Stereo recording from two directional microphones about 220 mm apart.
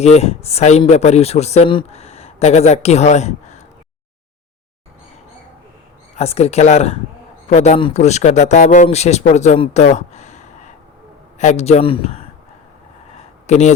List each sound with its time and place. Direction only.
0.0 s a man's voice: 30° left (ahead or behind)
6.1 s a man's voice: 30° left (ahead or behind)
13.5 s speech: 30° left (ahead or behind)